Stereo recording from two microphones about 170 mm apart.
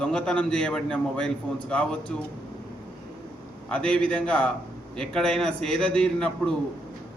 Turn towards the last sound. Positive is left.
turn(degrees=5)  # may be behind; listen again after turning